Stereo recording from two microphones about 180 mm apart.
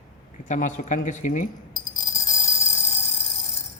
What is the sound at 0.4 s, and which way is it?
Speech, 45° left (ahead or behind).